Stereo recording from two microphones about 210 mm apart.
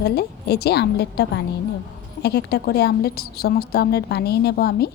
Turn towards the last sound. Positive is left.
turn(degrees=50)  # may be behind; listen again after turning